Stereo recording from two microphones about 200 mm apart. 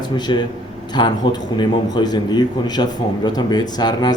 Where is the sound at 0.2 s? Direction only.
20° left (ahead or behind).